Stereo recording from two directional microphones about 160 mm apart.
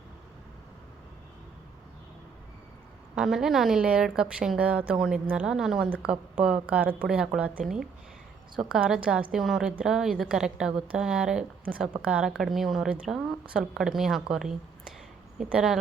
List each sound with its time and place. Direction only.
3.2 s a woman's voice: 5° right (ahead or behind)